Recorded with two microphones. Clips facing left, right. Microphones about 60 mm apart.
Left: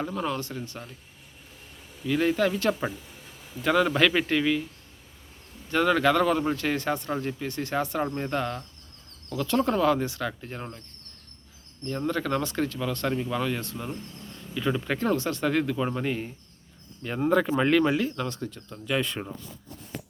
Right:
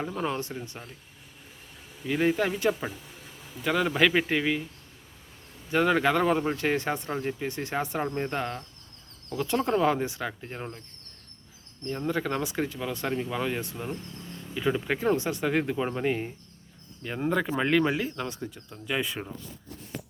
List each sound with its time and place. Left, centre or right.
0.2 s speech: right
2.0 s speech: centre
3.6 s speech: centre
5.7 s speech: centre
12.0 s speech: centre
17.0 s speech: centre